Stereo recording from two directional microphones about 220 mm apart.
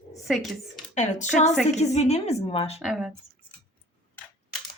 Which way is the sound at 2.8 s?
Centre (ahead or behind).